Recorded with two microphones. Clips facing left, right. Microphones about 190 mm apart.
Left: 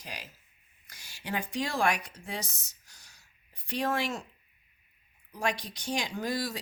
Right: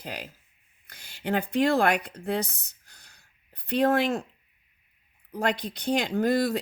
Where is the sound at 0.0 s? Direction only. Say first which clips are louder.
Right 7 dB; 55° right (ahead or behind).